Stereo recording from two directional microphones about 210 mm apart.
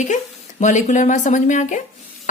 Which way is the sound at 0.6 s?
35° left (ahead or behind).